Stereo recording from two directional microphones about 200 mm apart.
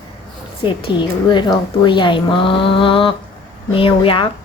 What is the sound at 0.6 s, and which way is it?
Speech, 25° left (ahead or behind).